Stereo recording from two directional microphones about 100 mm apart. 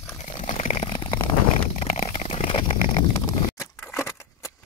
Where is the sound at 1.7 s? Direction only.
90° left.